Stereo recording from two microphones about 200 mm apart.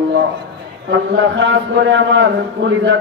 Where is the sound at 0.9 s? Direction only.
60° right (ahead or behind).